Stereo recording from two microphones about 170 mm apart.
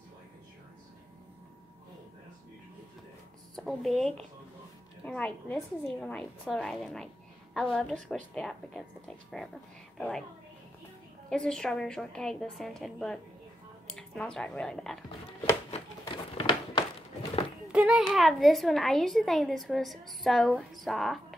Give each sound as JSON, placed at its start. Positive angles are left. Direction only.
{"t": 3.5, "sound": "a child's voice", "side_deg": 0}
{"t": 11.2, "sound": "a child's voice", "side_deg": 5}
{"t": 16.1, "sound": "a sound", "side_deg": 30}
{"t": 17.6, "sound": "a child's voice", "side_deg": -5}